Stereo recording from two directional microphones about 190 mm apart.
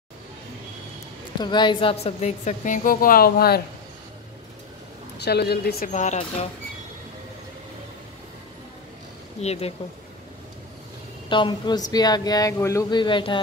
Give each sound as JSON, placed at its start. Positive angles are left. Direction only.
{"t": 1.4, "sound": "a woman's voice", "side_deg": 25}
{"t": 5.2, "sound": "a woman's voice", "side_deg": 60}
{"t": 5.9, "sound": "a woman's voice", "side_deg": 40}
{"t": 9.4, "sound": "a woman's voice", "side_deg": 35}
{"t": 11.2, "sound": "speech", "side_deg": 25}